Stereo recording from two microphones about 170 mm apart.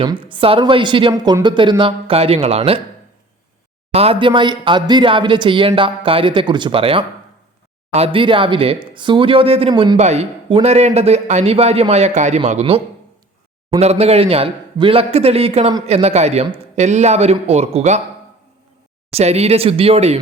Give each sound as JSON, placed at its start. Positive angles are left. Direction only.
{"t": 0.0, "sound": "a man's voice", "side_deg": -30}
{"t": 3.9, "sound": "a man's voice", "side_deg": -35}
{"t": 10.0, "sound": "a man's voice", "side_deg": -40}
{"t": 19.1, "sound": "a man's voice", "side_deg": -40}